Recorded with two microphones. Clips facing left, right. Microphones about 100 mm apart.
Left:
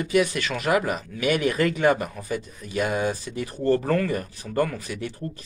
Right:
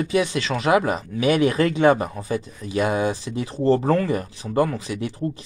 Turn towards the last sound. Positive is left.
turn(degrees=-20)  # may be behind; listen again after turning